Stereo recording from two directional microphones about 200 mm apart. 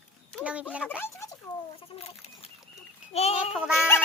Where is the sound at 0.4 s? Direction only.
5° right (ahead or behind).